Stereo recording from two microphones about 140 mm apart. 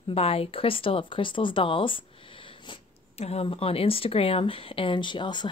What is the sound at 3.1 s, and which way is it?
Speech, 45° left (ahead or behind).